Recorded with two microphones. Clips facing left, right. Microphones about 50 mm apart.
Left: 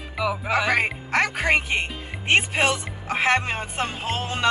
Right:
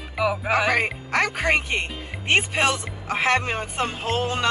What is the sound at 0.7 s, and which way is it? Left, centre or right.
Music, centre.